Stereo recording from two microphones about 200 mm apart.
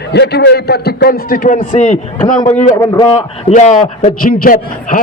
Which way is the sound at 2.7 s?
15° left (ahead or behind).